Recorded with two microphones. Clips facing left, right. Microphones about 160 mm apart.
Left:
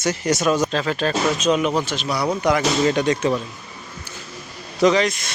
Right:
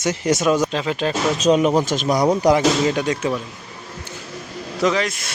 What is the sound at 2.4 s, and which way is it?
Speech, 35° right (ahead or behind).